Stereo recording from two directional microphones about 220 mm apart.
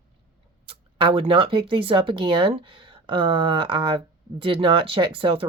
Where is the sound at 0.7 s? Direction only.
25° right (ahead or behind).